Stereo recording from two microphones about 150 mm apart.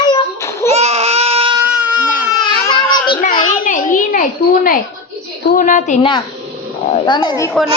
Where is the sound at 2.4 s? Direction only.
30° left (ahead or behind).